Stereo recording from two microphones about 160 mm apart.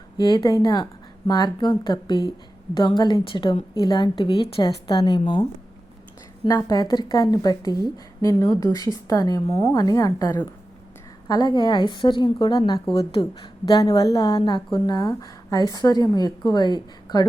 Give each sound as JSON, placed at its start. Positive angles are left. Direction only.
{"t": 0.2, "sound": "a woman's voice", "side_deg": 25}
{"t": 6.5, "sound": "a woman's voice", "side_deg": 25}
{"t": 12.9, "sound": "a woman's voice", "side_deg": 35}